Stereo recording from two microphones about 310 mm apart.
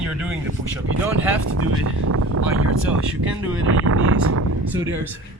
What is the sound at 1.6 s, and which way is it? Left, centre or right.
Speech, right.